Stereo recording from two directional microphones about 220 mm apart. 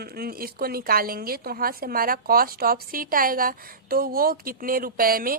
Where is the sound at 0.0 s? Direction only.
45° right (ahead or behind).